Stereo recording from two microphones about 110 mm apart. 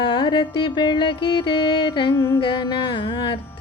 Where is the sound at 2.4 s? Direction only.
50° left (ahead or behind).